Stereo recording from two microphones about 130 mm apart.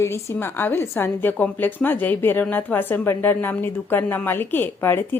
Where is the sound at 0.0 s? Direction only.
20° left (ahead or behind).